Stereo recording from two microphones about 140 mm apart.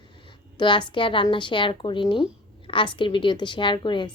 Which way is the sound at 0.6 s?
35° left (ahead or behind).